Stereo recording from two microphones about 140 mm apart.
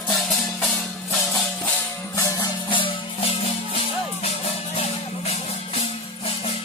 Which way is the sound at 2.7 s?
40° left (ahead or behind).